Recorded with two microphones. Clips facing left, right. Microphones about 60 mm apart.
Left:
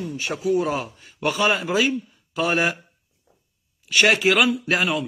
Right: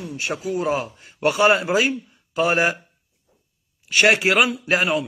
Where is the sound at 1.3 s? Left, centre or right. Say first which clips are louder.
Right 4 dB; centre.